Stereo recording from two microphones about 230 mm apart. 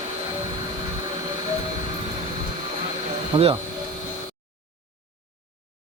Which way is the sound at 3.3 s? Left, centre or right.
Right.